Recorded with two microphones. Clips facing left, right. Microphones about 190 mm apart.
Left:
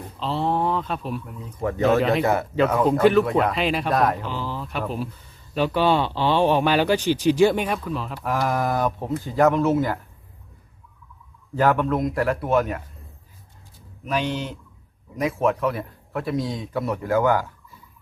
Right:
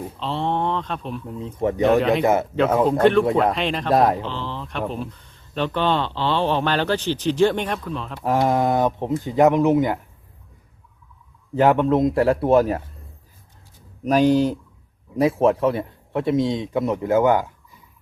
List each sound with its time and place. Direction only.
0.2 s speech: centre (ahead or behind)
1.2 s a man's voice: 25° right (ahead or behind)
1.8 s speech: centre (ahead or behind)
2.2 s a man's voice: 20° right (ahead or behind)
3.0 s speech: centre (ahead or behind)
3.9 s a man's voice: 25° right (ahead or behind)
4.3 s speech: 10° left (ahead or behind)
8.2 s a man's voice: 30° right (ahead or behind)
11.5 s a man's voice: 20° right (ahead or behind)
14.0 s a man's voice: 40° right (ahead or behind); by 17.7 s 20° right (ahead or behind)